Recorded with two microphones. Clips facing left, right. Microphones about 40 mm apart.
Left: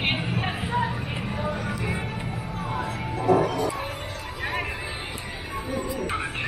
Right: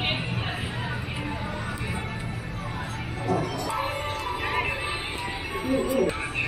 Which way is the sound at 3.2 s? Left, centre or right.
Centre.